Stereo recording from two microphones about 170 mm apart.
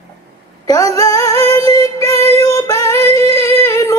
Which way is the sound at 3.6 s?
20° left (ahead or behind).